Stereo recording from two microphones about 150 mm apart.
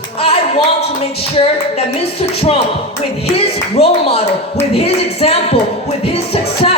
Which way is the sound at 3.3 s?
40° left (ahead or behind).